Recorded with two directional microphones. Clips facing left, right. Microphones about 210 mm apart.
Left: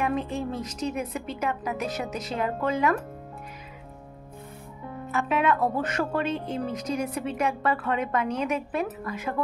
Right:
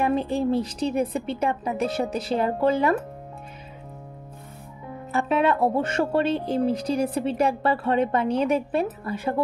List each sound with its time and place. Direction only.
0.0 s speech: 30° right (ahead or behind)
5.1 s speech: 30° right (ahead or behind)